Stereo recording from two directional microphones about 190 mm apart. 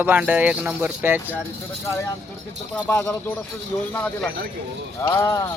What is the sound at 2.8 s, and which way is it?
Speech, 5° left (ahead or behind).